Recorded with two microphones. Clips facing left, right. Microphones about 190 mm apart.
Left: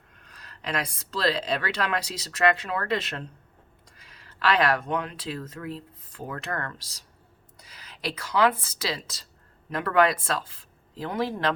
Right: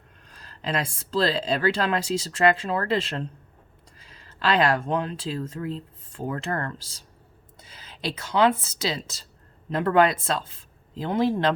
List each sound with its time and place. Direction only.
0.3 s speech: 30° right (ahead or behind)